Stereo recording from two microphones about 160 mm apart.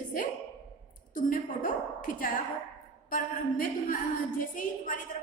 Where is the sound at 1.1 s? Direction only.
55° left (ahead or behind).